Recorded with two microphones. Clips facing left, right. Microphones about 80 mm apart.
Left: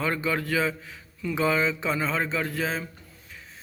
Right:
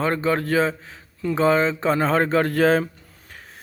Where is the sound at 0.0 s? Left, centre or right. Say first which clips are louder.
Right 6 dB; right.